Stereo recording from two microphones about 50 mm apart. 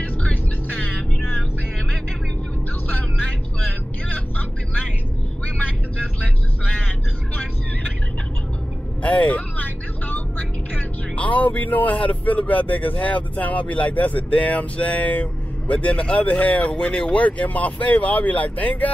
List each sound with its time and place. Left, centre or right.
0.0 s music: left
2.9 s vehicle: left
9.0 s vehicle: left
10.7 s speech: left